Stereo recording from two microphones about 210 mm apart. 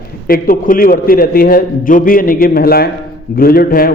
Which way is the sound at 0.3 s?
45° left (ahead or behind).